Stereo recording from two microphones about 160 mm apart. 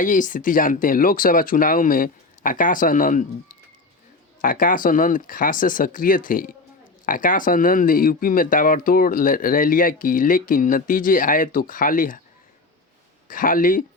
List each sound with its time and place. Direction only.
0.0 s speech: 55° left (ahead or behind)
4.4 s speech: 60° left (ahead or behind)
13.2 s speech: 60° left (ahead or behind)